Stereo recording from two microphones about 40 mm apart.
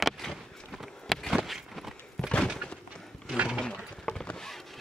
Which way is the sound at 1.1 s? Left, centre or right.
Centre.